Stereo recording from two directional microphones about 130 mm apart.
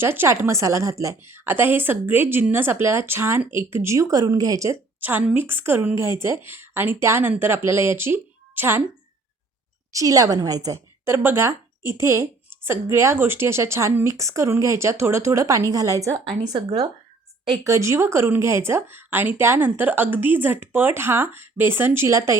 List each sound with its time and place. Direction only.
0.0 s a woman's voice: 15° right (ahead or behind)
9.9 s a woman's voice: 25° right (ahead or behind)
17.6 s speech: 25° right (ahead or behind)